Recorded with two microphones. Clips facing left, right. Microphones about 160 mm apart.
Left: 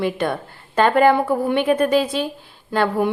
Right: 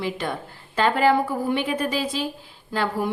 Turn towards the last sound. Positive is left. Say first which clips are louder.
# left 6 dB
turn(degrees=60)  # may be behind; listen again after turning